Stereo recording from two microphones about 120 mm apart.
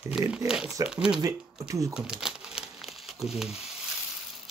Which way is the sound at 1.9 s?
5° right (ahead or behind).